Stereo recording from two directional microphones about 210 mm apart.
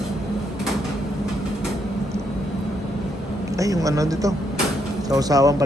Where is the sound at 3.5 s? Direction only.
15° right (ahead or behind).